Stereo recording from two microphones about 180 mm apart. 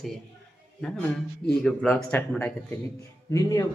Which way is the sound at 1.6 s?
5° left (ahead or behind).